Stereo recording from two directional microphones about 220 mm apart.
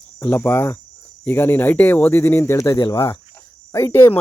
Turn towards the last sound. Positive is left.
turn(degrees=10)  # may be behind; listen again after turning